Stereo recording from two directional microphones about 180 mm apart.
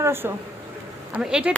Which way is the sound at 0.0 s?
15° right (ahead or behind).